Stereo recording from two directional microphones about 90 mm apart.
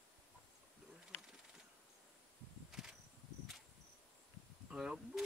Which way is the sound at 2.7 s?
5° right (ahead or behind).